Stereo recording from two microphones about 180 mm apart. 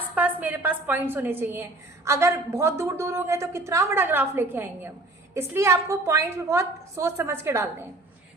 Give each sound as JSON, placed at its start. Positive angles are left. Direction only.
{"t": 0.1, "sound": "a woman's voice", "side_deg": -10}